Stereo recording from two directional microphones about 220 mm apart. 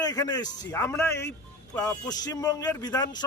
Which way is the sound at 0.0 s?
15° left (ahead or behind).